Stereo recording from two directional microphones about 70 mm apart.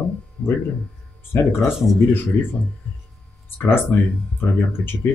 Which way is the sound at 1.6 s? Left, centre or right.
Centre.